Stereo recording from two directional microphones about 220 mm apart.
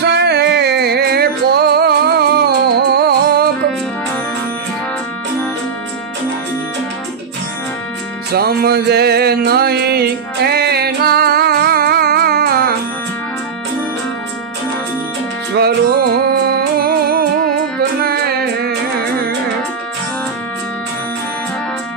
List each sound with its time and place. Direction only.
0.0 s music: 50° right (ahead or behind)
8.3 s music: 45° right (ahead or behind)
15.5 s music: 45° right (ahead or behind)